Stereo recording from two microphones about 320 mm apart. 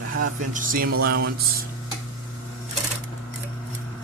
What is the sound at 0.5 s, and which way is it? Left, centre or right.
Speech, right.